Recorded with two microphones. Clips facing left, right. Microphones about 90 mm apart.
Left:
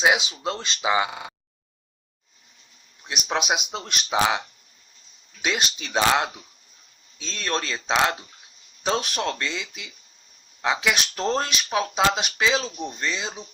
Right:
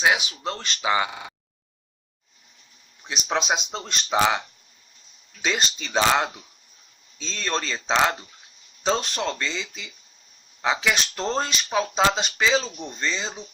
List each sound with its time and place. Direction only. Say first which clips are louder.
0.0 s speech: left 1 dB; 20° left (ahead or behind)
3.1 s speech: even; 5° left (ahead or behind)
5.4 s speech: even; 5° left (ahead or behind)